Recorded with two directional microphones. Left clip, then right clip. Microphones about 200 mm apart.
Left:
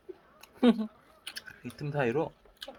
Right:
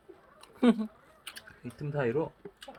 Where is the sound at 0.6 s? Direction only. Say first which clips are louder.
Left 1 dB; centre (ahead or behind).